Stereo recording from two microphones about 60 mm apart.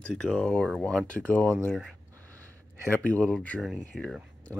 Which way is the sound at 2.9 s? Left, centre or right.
Left.